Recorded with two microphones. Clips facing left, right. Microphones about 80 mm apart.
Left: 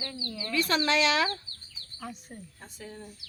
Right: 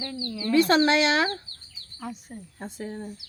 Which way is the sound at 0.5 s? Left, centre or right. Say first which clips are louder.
Right 7 dB; right.